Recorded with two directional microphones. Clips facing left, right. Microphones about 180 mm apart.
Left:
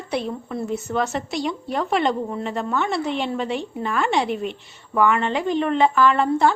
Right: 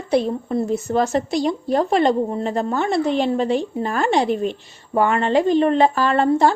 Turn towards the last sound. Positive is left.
turn(degrees=-35)  # may be behind; listen again after turning